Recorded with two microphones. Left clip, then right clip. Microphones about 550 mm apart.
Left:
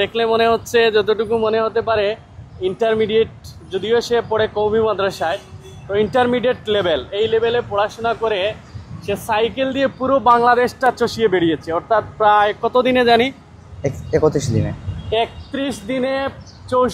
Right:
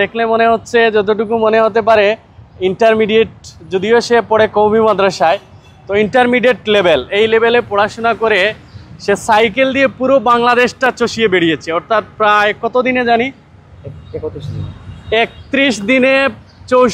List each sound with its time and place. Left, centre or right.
0.0 s speech: centre
15.0 s speech: right